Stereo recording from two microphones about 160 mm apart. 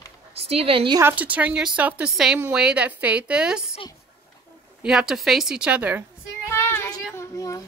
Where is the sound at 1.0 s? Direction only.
10° right (ahead or behind).